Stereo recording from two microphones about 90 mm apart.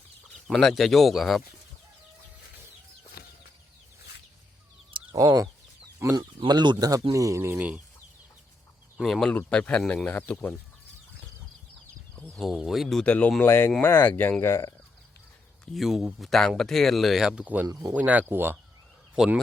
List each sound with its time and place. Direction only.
0.4 s speech: centre (ahead or behind)
5.1 s speech: 40° right (ahead or behind)
6.0 s speech: 30° right (ahead or behind)
6.5 s speech: 50° right (ahead or behind); by 7.6 s 30° right (ahead or behind)
9.0 s speech: 10° right (ahead or behind)
9.5 s speech: 10° left (ahead or behind)
10.1 s speech: 20° left (ahead or behind)
12.1 s speech: 10° left (ahead or behind)
13.0 s speech: 15° left (ahead or behind)
13.4 s speech: 25° left (ahead or behind)
14.4 s speech: 30° left (ahead or behind)
15.6 s speech: centre (ahead or behind); by 18.5 s 25° right (ahead or behind)
19.2 s speech: 5° right (ahead or behind)